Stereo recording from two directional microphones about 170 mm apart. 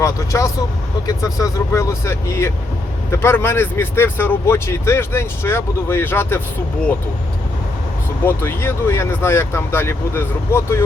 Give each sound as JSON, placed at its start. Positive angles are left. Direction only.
{"t": 0.0, "sound": "speech", "side_deg": 15}
{"t": 8.2, "sound": "speech", "side_deg": 15}